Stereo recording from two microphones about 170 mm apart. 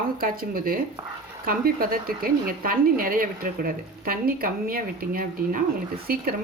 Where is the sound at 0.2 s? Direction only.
60° right (ahead or behind).